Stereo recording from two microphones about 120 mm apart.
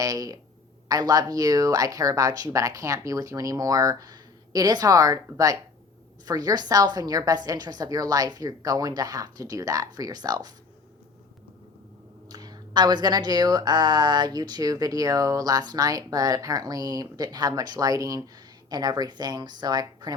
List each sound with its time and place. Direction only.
0.0 s speech: 30° right (ahead or behind)
12.3 s speech: 35° right (ahead or behind)